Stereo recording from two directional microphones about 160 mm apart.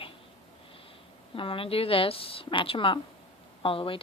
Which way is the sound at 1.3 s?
35° left (ahead or behind).